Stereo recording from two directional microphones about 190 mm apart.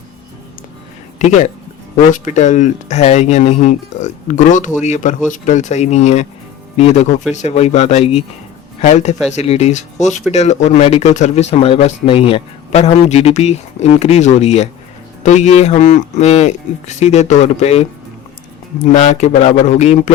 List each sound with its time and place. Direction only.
2.1 s speech: 40° left (ahead or behind)